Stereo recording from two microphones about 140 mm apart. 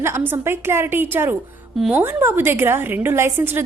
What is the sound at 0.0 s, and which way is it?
A woman's voice, 15° right (ahead or behind).